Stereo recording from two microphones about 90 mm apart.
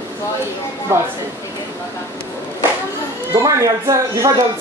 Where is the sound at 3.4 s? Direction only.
35° right (ahead or behind).